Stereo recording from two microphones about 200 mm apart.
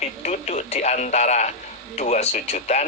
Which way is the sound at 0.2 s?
35° left (ahead or behind).